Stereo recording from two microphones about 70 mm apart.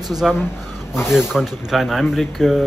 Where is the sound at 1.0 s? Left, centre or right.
Centre.